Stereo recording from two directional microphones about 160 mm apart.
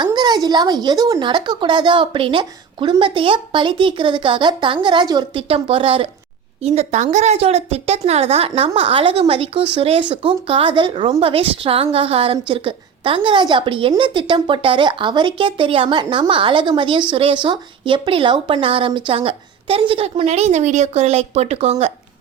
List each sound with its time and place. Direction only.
0.0 s speech: 25° right (ahead or behind)